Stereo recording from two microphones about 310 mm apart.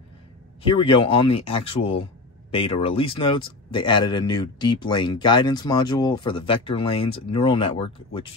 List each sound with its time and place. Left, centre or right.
0.6 s speech: centre